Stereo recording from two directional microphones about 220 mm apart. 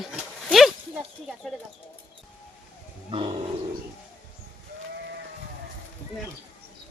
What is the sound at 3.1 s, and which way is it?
Roaring cats, 25° right (ahead or behind).